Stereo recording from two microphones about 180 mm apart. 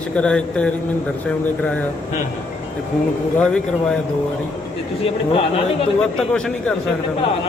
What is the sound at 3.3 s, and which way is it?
Speech, 5° left (ahead or behind).